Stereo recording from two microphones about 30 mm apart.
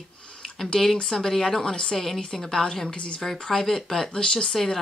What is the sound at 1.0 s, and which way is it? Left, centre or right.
Speech, centre.